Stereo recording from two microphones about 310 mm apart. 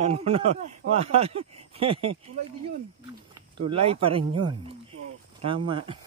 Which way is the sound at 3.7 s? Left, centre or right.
Centre.